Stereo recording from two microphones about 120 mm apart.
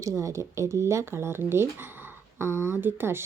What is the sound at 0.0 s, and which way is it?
Speech, 25° right (ahead or behind).